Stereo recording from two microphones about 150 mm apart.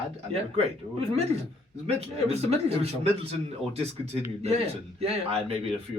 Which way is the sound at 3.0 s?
45° right (ahead or behind).